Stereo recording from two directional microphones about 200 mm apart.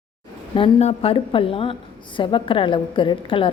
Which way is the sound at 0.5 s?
25° left (ahead or behind).